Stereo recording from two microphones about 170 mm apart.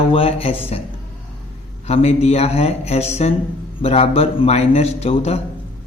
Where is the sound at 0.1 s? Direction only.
35° left (ahead or behind).